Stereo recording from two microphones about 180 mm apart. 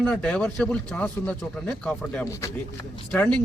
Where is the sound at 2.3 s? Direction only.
15° left (ahead or behind).